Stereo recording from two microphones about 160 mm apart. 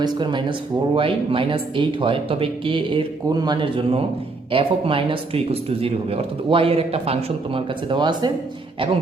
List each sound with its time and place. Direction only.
0.0 s speech: 30° right (ahead or behind)